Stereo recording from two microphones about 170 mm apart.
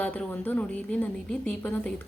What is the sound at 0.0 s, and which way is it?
A woman's voice, 10° left (ahead or behind).